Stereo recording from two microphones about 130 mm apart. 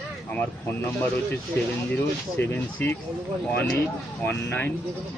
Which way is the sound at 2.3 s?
15° left (ahead or behind).